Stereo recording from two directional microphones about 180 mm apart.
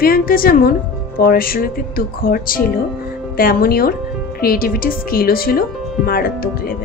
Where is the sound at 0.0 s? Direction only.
55° left (ahead or behind).